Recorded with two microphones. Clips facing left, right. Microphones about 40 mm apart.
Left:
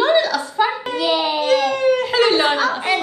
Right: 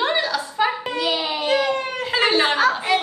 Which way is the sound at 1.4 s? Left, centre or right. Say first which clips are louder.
Left 3 dB; right.